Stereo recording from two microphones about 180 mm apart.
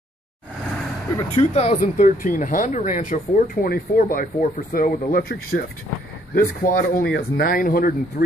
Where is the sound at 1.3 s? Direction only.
35° left (ahead or behind).